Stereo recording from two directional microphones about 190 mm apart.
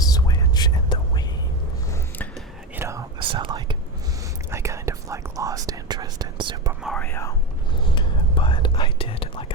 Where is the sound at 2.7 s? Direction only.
15° right (ahead or behind).